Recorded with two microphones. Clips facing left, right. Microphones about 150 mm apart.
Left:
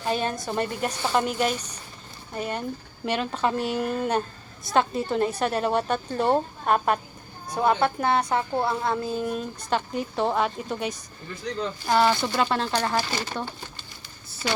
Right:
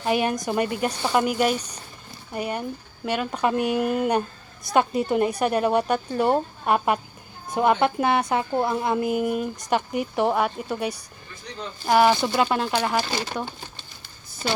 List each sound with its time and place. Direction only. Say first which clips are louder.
0.1 s a woman's voice: right 4 dB; 15° right (ahead or behind)